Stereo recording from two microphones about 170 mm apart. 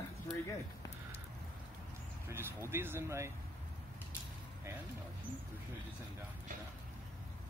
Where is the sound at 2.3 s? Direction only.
15° right (ahead or behind).